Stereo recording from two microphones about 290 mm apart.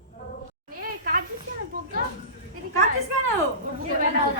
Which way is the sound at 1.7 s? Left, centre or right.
Right.